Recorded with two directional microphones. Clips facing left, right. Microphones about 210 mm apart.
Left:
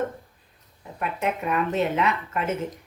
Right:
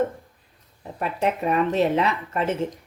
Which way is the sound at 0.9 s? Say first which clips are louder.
Right 3 dB; 35° right (ahead or behind).